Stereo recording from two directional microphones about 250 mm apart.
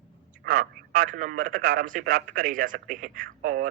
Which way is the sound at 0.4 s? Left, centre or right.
Right.